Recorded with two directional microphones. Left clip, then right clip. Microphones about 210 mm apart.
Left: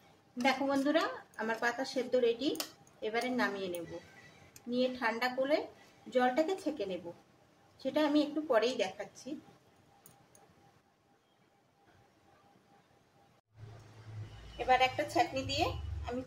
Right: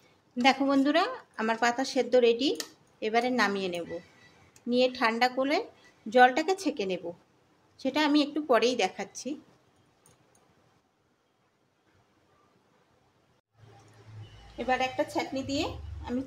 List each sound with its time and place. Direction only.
0.4 s a woman's voice: 50° right (ahead or behind)
14.7 s speech: 25° right (ahead or behind)